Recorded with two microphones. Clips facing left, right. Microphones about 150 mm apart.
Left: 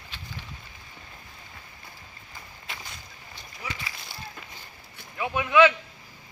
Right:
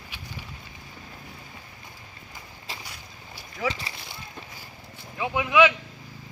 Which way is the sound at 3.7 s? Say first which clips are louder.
Right 1 dB; 30° right (ahead or behind).